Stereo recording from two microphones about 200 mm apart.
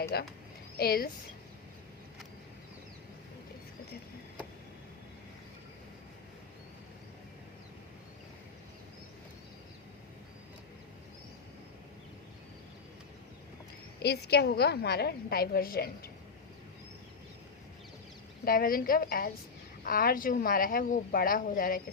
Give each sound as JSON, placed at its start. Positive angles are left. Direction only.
{"t": 0.1, "sound": "a woman's voice", "side_deg": 55}
{"t": 14.0, "sound": "a woman's voice", "side_deg": 55}
{"t": 18.4, "sound": "a woman's voice", "side_deg": 45}